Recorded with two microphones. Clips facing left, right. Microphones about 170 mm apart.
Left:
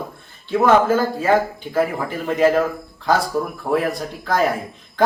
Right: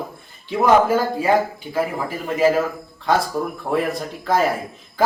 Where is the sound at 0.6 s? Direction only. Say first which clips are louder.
Even; 15° right (ahead or behind).